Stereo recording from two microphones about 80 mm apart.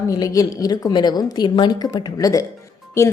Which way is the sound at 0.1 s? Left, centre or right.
Left.